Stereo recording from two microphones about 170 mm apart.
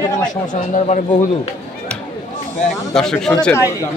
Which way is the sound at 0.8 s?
40° left (ahead or behind).